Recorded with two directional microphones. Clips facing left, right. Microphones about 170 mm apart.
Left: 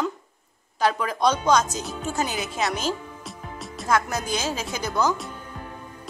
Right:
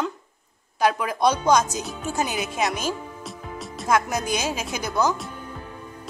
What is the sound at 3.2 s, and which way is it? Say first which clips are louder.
Music: right 2 dB; centre (ahead or behind).